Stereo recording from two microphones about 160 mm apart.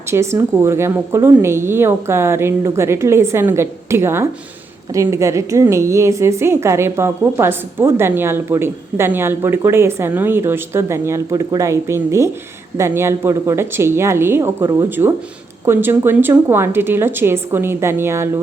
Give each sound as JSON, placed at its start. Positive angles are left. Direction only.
{"t": 0.1, "sound": "a woman's voice", "side_deg": -15}